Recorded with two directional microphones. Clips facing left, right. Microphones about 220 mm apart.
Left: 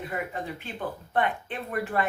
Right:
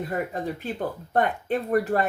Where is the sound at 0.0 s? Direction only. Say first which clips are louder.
Right 5 dB; 40° right (ahead or behind).